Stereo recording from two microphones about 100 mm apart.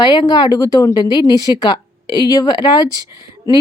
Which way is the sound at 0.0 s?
45° left (ahead or behind).